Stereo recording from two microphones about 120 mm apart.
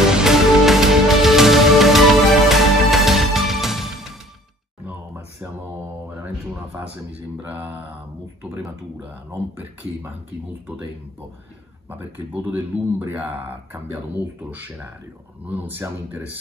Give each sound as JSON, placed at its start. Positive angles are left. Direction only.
{"t": 0.1, "sound": "music", "side_deg": -5}
{"t": 4.8, "sound": "a sound", "side_deg": -20}
{"t": 6.0, "sound": "speech", "side_deg": -15}
{"t": 11.9, "sound": "speech", "side_deg": -15}